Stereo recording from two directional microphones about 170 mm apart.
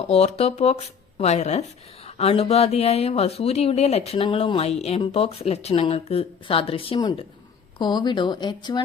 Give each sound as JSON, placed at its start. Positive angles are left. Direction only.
{"t": 0.1, "sound": "speech", "side_deg": 35}